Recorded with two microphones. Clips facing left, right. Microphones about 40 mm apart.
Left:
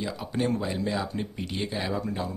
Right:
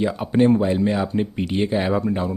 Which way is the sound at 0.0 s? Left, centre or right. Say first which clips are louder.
Right 11 dB; right.